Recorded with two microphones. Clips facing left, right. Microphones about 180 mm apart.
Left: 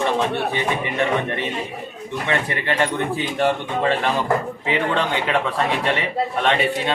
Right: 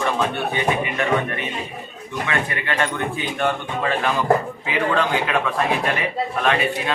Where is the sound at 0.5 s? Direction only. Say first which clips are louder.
Right 1 dB; 30° left (ahead or behind).